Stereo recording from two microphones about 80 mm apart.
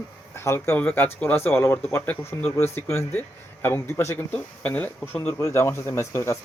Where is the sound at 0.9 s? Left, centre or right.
Left.